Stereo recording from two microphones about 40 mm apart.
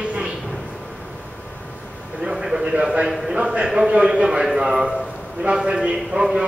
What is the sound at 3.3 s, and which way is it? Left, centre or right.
A man's voice, right.